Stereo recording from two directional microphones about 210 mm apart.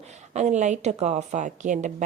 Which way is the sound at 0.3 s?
35° right (ahead or behind).